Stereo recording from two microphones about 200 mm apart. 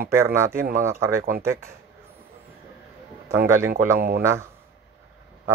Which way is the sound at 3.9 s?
50° right (ahead or behind).